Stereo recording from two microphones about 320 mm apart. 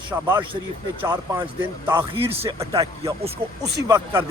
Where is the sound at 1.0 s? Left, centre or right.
Centre.